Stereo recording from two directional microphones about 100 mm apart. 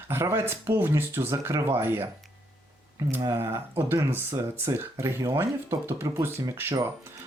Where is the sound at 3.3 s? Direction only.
25° right (ahead or behind).